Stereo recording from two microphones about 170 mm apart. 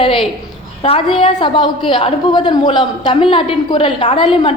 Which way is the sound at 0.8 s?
35° left (ahead or behind).